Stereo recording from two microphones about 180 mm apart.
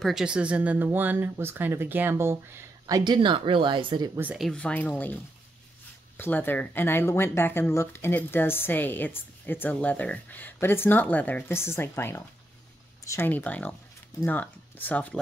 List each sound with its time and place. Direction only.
0.0 s speech: 5° right (ahead or behind)
3.0 s speech: 25° right (ahead or behind)
4.2 s speech: 5° right (ahead or behind)